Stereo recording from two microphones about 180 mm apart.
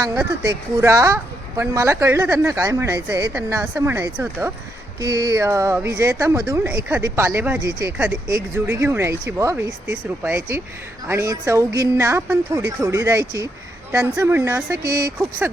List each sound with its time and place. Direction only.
0.0 s speech: 20° right (ahead or behind)